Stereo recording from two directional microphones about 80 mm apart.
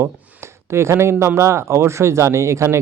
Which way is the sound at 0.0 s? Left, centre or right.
Right.